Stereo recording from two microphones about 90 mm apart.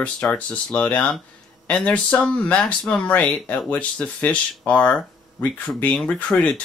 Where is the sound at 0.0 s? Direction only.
15° left (ahead or behind).